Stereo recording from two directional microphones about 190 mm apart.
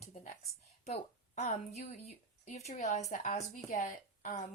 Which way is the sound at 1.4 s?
35° left (ahead or behind).